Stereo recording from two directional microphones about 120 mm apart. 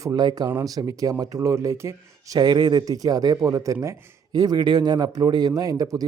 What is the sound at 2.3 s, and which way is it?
Speech, 35° right (ahead or behind).